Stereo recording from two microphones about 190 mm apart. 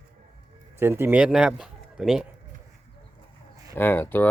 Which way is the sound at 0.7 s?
10° right (ahead or behind).